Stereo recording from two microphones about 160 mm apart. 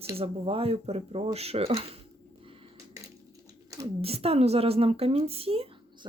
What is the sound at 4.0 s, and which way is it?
A woman's voice, 40° right (ahead or behind).